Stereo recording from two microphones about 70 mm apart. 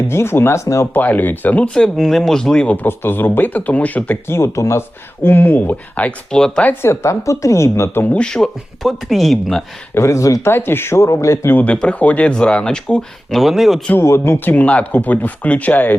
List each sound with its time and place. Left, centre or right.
0.1 s speech: left
0.9 s speech: left
1.7 s speech: centre
2.8 s speech: left
4.3 s a woman's voice: left
5.2 s speech: left
6.8 s a woman's voice: left
8.1 s speech: centre
9.9 s a woman's voice: left
10.4 s speech: left
11.6 s speech: centre
14.0 s speech: left
14.3 s speech: left